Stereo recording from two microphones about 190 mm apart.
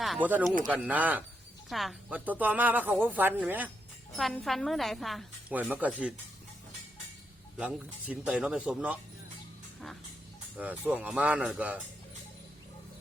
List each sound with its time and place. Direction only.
0.0 s a woman's voice: 5° right (ahead or behind)
7.6 s speech: 5° right (ahead or behind)
10.6 s speech: 5° right (ahead or behind)